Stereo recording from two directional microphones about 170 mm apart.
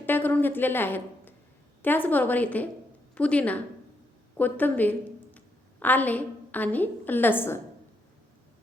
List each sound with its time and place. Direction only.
0.0 s a woman's voice: 10° left (ahead or behind)